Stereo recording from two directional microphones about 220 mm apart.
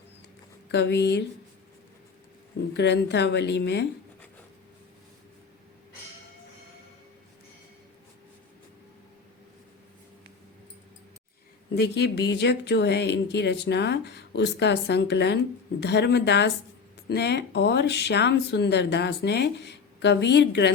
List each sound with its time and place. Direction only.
0.7 s speech: 50° left (ahead or behind)
2.6 s speech: 50° left (ahead or behind)
11.7 s speech: 50° left (ahead or behind)